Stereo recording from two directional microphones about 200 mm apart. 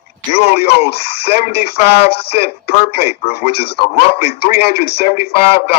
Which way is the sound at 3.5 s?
55° left (ahead or behind).